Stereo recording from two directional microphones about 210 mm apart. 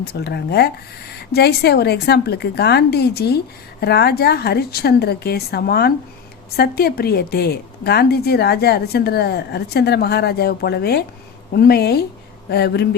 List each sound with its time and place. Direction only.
0.1 s a woman's voice: 50° left (ahead or behind)